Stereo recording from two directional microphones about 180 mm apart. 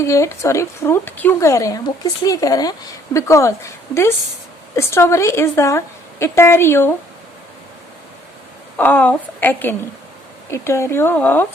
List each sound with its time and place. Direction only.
0.0 s a woman's voice: 15° left (ahead or behind)
8.8 s a woman's voice: 10° left (ahead or behind)